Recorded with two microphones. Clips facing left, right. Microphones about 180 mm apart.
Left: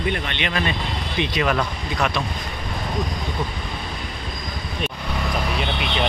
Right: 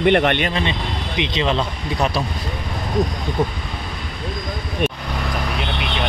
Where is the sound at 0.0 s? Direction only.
70° right (ahead or behind).